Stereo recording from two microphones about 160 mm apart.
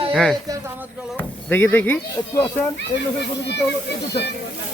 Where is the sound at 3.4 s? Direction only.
90° left.